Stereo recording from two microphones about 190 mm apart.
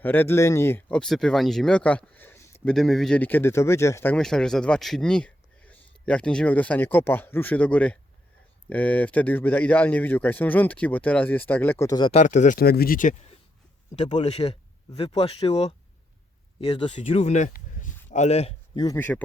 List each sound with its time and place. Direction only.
0.0 s speech: 10° left (ahead or behind)
2.7 s speech: centre (ahead or behind); by 12.1 s 20° left (ahead or behind)
12.1 s speech: 40° left (ahead or behind)
14.3 s speech: 30° left (ahead or behind)
18.9 s speech: 10° left (ahead or behind)